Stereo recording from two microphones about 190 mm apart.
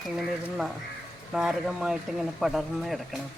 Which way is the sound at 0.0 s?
Centre (ahead or behind).